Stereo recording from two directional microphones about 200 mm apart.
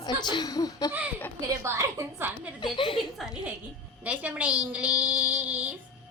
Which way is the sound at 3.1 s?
Centre (ahead or behind).